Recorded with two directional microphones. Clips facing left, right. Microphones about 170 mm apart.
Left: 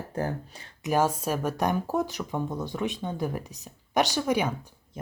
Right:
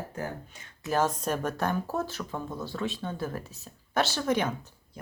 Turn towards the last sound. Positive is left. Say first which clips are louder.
# left 3 dB
turn(degrees=15)  # may be behind; listen again after turning